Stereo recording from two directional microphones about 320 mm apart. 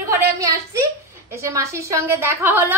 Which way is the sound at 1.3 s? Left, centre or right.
Centre.